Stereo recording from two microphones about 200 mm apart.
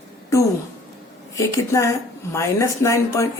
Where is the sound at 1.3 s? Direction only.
15° left (ahead or behind).